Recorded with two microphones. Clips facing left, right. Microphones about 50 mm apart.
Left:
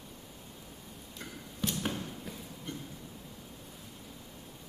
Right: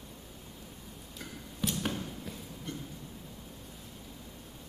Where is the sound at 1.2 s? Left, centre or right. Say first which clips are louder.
Right 1 dB; centre.